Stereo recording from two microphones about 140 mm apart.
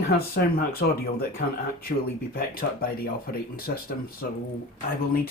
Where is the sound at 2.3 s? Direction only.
90° left.